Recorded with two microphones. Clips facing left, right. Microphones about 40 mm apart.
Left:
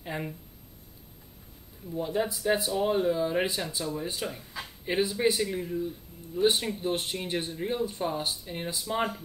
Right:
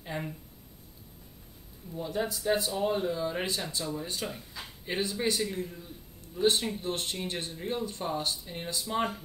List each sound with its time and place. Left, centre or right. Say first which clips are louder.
0.0 s a sound: left 2 dB; centre
1.9 s speech: left 3 dB; left
2.4 s speech: left 1 dB; centre